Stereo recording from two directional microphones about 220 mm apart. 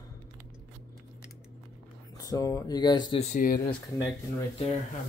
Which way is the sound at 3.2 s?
35° left (ahead or behind).